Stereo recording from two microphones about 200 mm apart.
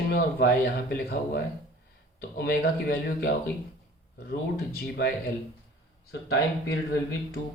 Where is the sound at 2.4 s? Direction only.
50° left (ahead or behind).